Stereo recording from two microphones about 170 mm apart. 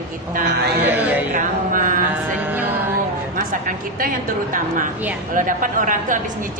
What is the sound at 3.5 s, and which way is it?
Speech, 55° right (ahead or behind).